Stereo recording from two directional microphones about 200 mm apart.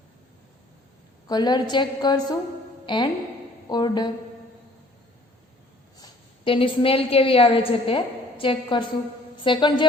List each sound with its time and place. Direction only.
1.3 s a woman's voice: 20° left (ahead or behind)
6.0 s a woman's voice: 25° left (ahead or behind)